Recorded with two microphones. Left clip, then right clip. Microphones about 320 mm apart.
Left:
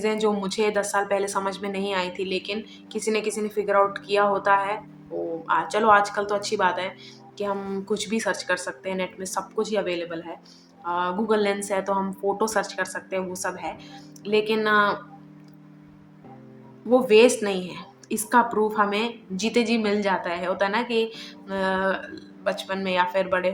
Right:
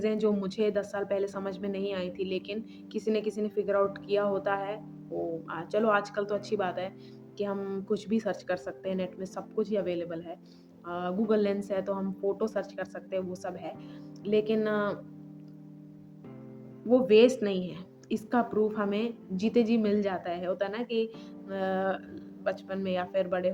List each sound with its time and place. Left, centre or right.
0.0 s a woman's voice: right
16.9 s a woman's voice: right